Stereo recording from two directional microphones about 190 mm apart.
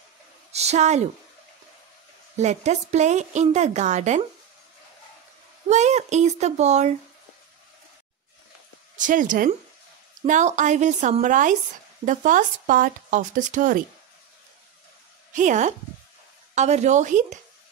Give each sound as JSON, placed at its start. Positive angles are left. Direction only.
{"t": 0.5, "sound": "a sound", "side_deg": -35}
{"t": 2.3, "sound": "a woman's voice", "side_deg": -35}
{"t": 5.7, "sound": "a woman's voice", "side_deg": -35}
{"t": 8.9, "sound": "a woman's voice", "side_deg": -45}
{"t": 15.3, "sound": "a woman's voice", "side_deg": -40}